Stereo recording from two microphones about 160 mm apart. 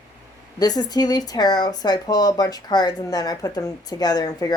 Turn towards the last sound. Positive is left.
turn(degrees=25)  # may be behind; listen again after turning